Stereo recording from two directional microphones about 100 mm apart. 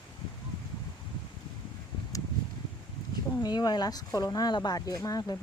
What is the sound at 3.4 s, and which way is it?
Speech, 45° left (ahead or behind).